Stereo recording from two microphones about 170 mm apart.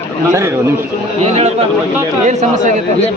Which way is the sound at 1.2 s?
35° right (ahead or behind).